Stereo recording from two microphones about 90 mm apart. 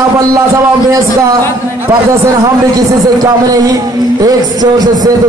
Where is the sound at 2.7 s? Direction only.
45° right (ahead or behind).